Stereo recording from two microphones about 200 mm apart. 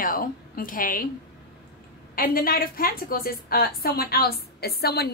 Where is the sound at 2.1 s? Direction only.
45° left (ahead or behind).